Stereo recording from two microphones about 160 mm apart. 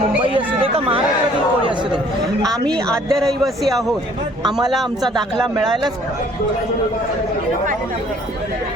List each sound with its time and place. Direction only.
0.0 s chatter: 35° right (ahead or behind)
2.8 s speech: 5° left (ahead or behind)